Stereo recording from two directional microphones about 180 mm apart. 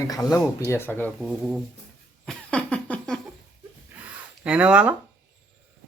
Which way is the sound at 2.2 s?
5° left (ahead or behind).